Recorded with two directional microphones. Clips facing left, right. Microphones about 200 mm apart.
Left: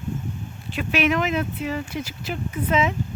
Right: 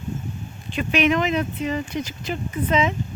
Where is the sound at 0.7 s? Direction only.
5° left (ahead or behind).